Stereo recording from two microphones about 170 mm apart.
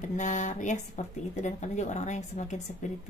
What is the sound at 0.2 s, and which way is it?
Speech, 45° left (ahead or behind).